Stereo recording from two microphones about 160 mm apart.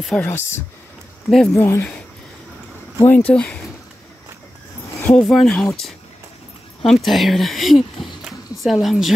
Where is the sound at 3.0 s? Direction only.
10° left (ahead or behind).